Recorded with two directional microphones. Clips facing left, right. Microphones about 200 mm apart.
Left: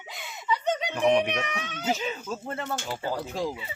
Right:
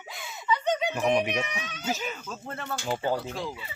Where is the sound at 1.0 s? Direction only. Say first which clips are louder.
Left 5 dB; 5° right (ahead or behind).